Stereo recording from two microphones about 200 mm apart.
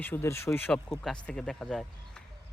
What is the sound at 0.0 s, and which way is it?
Speech, 10° left (ahead or behind).